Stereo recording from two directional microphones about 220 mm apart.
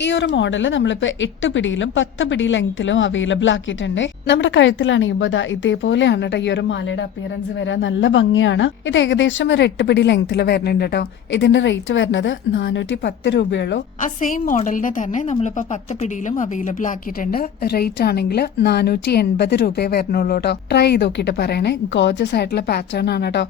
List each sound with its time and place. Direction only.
0.0 s a woman's voice: 55° left (ahead or behind)
14.0 s a woman's voice: 35° left (ahead or behind)